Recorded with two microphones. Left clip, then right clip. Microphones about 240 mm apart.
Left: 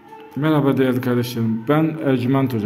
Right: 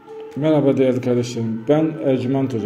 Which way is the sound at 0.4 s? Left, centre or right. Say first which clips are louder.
Right 2 dB; left.